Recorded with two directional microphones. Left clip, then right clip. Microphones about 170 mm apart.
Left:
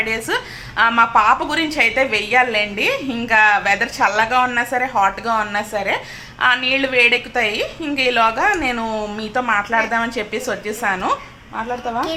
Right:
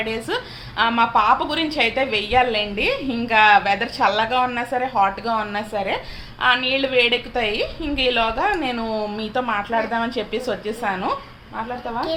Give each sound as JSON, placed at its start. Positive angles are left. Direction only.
{"t": 0.0, "sound": "a woman's voice", "side_deg": 0}
{"t": 11.5, "sound": "a woman's voice", "side_deg": 20}